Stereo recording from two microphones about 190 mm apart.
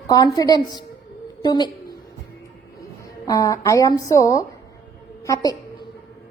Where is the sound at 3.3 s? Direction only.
20° left (ahead or behind).